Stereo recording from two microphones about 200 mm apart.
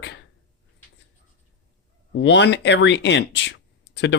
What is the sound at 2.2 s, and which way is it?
Speech, 60° left (ahead or behind).